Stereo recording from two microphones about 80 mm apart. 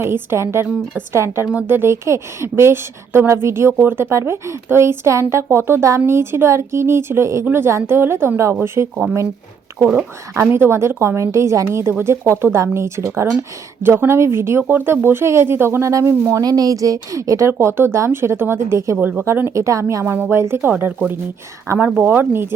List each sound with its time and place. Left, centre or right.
0.0 s a woman's voice: right
10.3 s a woman's voice: right
16.4 s a woman's voice: right
18.9 s a woman's voice: centre
19.5 s a woman's voice: right
21.7 s a woman's voice: right
22.0 s speech: right